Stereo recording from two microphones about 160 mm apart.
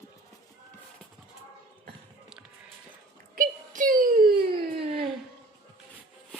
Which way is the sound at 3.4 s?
55° right (ahead or behind).